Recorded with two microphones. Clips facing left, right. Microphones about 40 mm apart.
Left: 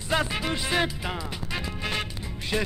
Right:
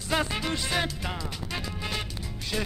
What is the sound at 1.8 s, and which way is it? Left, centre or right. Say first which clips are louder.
Music: left 5 dB; left.